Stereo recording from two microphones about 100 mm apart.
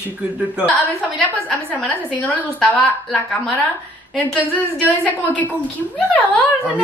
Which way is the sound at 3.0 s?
Centre (ahead or behind).